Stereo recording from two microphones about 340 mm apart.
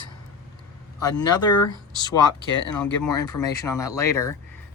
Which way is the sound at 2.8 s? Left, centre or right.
Centre.